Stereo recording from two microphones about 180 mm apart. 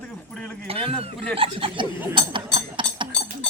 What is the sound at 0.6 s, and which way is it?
Speech, 35° right (ahead or behind).